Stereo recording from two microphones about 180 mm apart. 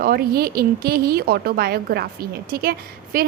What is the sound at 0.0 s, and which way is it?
A woman's voice, 55° right (ahead or behind).